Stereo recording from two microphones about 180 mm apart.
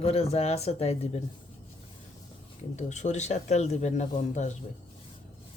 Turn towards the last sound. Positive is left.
turn(degrees=40)  # may be behind; listen again after turning